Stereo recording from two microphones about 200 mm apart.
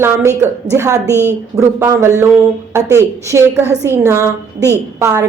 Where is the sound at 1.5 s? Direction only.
15° right (ahead or behind).